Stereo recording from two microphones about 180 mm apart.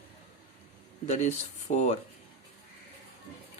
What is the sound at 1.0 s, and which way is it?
Speech, 40° left (ahead or behind).